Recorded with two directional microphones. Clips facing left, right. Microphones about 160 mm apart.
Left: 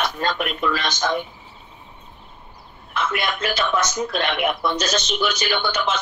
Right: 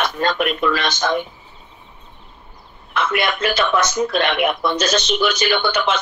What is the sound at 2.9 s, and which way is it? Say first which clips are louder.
A man's voice: right 4 dB; 70° right (ahead or behind).